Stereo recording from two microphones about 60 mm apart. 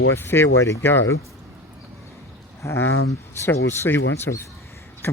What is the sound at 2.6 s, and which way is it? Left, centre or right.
Speech, left.